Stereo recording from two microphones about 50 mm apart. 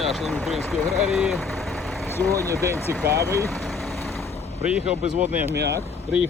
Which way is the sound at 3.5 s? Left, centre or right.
Centre.